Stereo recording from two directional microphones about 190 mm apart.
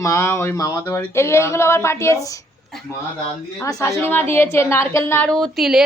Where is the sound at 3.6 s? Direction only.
15° left (ahead or behind).